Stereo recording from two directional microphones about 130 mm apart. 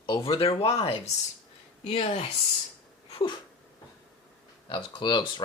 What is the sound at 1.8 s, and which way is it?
Speech, 45° left (ahead or behind).